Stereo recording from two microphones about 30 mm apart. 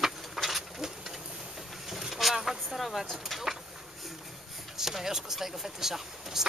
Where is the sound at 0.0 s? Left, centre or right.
Centre.